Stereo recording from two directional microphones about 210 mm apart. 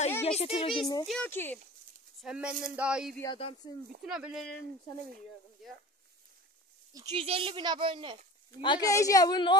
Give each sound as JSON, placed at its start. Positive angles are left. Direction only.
{"t": 0.2, "sound": "a woman's voice", "side_deg": 30}
{"t": 1.0, "sound": "speech", "side_deg": 5}
{"t": 2.2, "sound": "a sound", "side_deg": -5}
{"t": 3.6, "sound": "a woman's voice", "side_deg": 20}
{"t": 4.0, "sound": "a sound", "side_deg": -5}
{"t": 6.9, "sound": "speech", "side_deg": -20}
{"t": 8.5, "sound": "a woman's voice", "side_deg": 20}